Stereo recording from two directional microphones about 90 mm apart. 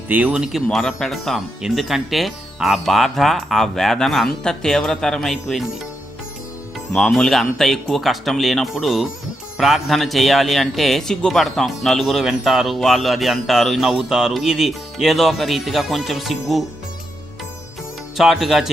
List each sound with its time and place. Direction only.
0.1 s speech: 15° right (ahead or behind)
0.4 s a man's voice: centre (ahead or behind)
6.9 s a man's voice: 5° left (ahead or behind)
18.2 s a man's voice: 5° right (ahead or behind)